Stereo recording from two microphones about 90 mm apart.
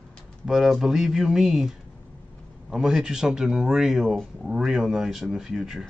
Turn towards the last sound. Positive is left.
turn(degrees=-5)  # may be behind; listen again after turning